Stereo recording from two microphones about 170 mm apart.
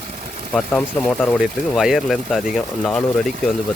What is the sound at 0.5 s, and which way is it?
Speech, 5° left (ahead or behind).